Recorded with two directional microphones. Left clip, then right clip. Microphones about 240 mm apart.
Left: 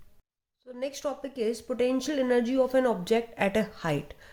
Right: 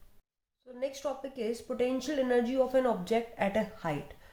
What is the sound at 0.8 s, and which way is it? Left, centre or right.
A woman's voice, left.